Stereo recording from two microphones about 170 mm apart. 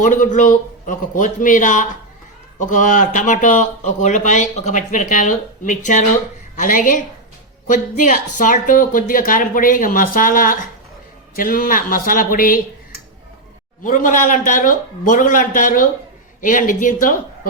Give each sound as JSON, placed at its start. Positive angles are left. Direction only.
{"t": 0.0, "sound": "speech", "side_deg": 50}